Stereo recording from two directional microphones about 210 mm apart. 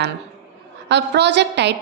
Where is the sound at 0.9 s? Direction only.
55° right (ahead or behind).